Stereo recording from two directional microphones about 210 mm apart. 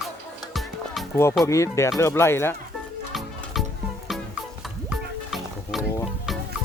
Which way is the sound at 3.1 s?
Centre (ahead or behind).